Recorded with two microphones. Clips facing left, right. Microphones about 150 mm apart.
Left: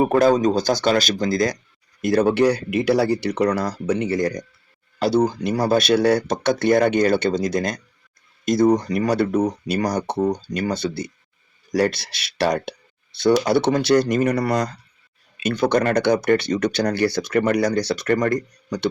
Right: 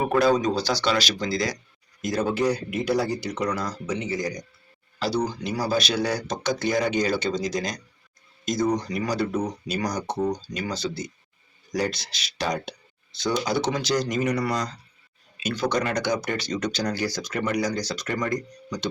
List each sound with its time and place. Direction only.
0.0 s speech: 45° left (ahead or behind)
2.0 s speech: 65° left (ahead or behind)